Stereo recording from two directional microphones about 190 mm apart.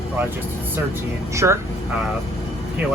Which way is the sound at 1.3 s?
15° right (ahead or behind).